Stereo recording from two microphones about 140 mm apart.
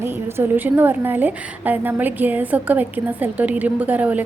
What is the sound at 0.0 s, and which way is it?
A woman's voice, 15° right (ahead or behind).